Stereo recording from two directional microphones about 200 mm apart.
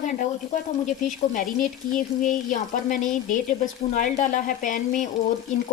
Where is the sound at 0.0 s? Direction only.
35° left (ahead or behind).